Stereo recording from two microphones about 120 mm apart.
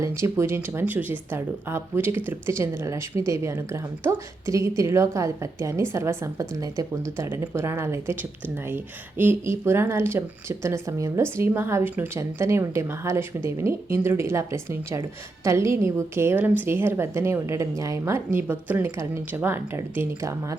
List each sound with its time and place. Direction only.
0.0 s a woman's voice: 25° right (ahead or behind)